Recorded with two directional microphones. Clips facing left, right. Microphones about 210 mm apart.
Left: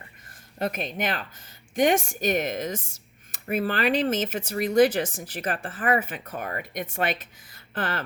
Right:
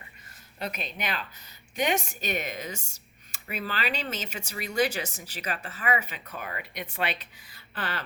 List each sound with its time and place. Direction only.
0.3 s speech: 50° left (ahead or behind)